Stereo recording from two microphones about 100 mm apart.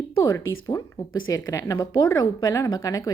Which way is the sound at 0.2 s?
30° left (ahead or behind).